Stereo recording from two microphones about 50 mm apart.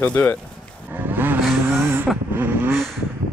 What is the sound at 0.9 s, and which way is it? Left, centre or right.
Vehicle, right.